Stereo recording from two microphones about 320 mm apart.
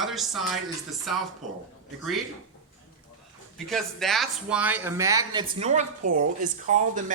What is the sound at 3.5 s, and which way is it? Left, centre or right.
Speech, centre.